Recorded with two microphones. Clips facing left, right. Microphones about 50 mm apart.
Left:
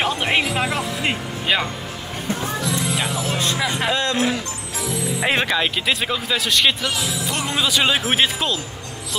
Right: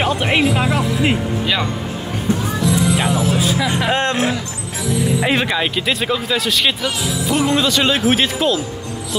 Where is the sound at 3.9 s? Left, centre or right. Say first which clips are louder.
Right 3 dB; right.